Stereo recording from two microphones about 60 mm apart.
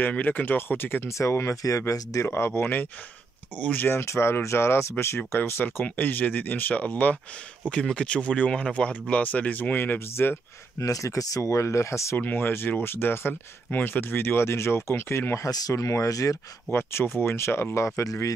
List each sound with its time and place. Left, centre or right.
0.1 s speech: left
1.0 s speech: left
2.2 s speech: left
3.5 s speech: left
3.9 s speech: left
10.8 s speech: left
12.2 s speech: left
15.4 s speech: left
16.7 s speech: left